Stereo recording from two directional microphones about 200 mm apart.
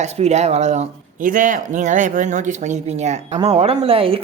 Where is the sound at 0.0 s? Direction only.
35° right (ahead or behind).